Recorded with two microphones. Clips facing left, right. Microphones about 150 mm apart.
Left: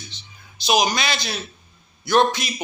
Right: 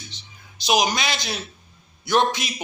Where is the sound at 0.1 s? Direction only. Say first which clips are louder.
Even; 15° right (ahead or behind).